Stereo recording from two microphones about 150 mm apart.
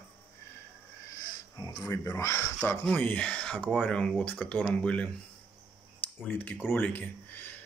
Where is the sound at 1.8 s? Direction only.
15° left (ahead or behind).